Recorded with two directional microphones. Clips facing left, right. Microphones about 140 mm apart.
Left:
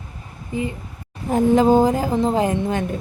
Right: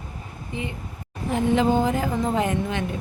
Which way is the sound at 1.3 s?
40° left (ahead or behind).